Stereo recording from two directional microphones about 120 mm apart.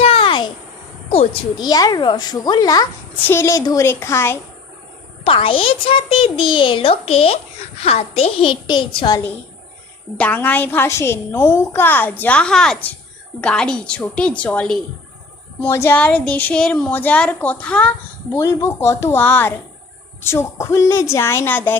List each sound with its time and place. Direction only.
0.0 s a sound: 50° left (ahead or behind)
1.5 s a child's voice: 35° left (ahead or behind)
3.2 s a woman's voice: 20° left (ahead or behind)
5.2 s a child's voice: 45° left (ahead or behind)
8.6 s a child's voice: 40° left (ahead or behind)
10.2 s a woman's voice: 15° left (ahead or behind)
18.3 s a woman's voice: 25° left (ahead or behind)